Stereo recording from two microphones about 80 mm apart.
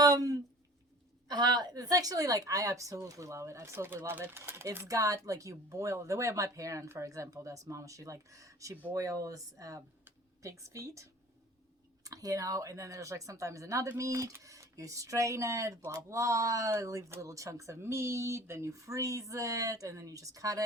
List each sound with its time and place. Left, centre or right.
0.0 s a sound: right
1.3 s speech: right
4.9 s speech: right